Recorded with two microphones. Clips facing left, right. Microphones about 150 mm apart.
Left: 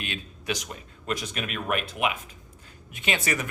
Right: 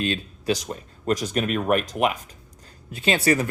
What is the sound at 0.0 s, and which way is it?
A man's voice, 35° right (ahead or behind).